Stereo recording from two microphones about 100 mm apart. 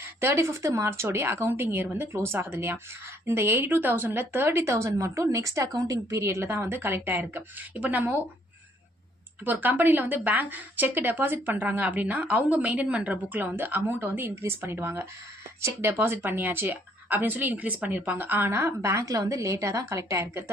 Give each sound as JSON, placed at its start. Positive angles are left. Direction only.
{"t": 0.0, "sound": "a woman's voice", "side_deg": -25}
{"t": 9.4, "sound": "a woman's voice", "side_deg": -20}